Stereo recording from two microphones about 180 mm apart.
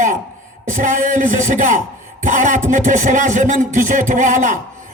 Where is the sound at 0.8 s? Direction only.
45° right (ahead or behind).